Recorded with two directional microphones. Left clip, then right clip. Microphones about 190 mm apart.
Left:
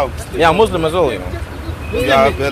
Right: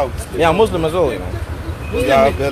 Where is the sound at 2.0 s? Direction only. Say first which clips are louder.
Left 1 dB; 15° right (ahead or behind).